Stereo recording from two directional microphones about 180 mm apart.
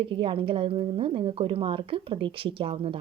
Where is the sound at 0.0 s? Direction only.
30° right (ahead or behind).